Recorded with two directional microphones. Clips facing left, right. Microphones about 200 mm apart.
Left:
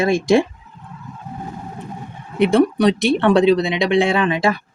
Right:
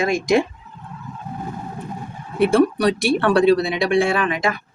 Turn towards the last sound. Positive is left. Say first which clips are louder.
# left 3 dB
turn(degrees=30)  # may be behind; listen again after turning